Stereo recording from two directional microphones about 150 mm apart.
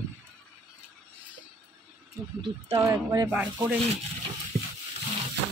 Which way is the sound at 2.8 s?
20° right (ahead or behind).